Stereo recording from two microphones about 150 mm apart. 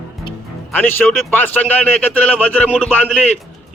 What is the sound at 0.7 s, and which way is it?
Speech, 15° left (ahead or behind).